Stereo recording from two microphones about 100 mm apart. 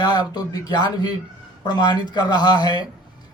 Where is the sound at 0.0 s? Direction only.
45° left (ahead or behind).